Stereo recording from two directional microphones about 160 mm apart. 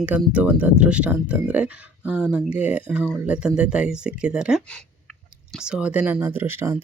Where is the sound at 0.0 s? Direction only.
10° right (ahead or behind).